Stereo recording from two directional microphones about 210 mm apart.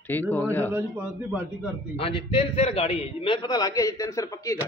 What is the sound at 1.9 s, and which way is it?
A man's voice, 30° left (ahead or behind).